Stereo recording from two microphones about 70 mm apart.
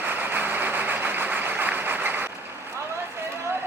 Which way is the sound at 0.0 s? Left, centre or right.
Right.